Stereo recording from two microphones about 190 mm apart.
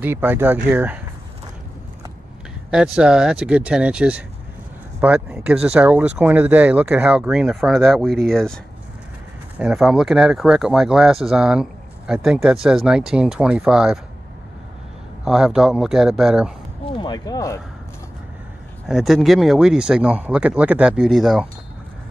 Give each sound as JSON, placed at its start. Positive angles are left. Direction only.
{"t": 0.0, "sound": "speech", "side_deg": -10}
{"t": 2.7, "sound": "speech", "side_deg": -5}
{"t": 9.6, "sound": "speech", "side_deg": 0}
{"t": 15.2, "sound": "speech", "side_deg": -5}
{"t": 16.9, "sound": "speech", "side_deg": 20}
{"t": 18.9, "sound": "speech", "side_deg": 0}